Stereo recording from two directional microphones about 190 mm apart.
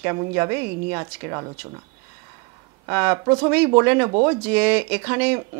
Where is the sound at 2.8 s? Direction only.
15° right (ahead or behind).